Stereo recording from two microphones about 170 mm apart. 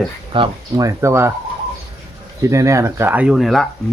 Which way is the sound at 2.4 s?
15° right (ahead or behind).